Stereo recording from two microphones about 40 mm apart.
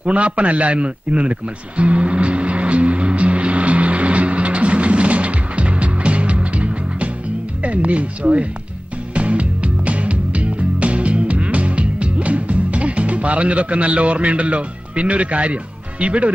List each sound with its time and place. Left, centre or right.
0.0 s a sound: right
7.6 s speech: right
9.1 s music: right